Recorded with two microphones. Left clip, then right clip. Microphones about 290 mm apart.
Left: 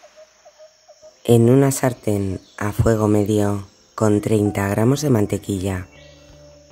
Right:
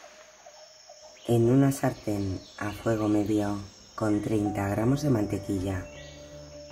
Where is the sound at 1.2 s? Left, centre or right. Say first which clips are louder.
Left 9 dB; left.